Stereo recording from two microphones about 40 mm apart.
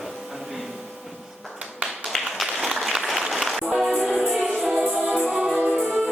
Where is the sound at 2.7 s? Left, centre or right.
Centre.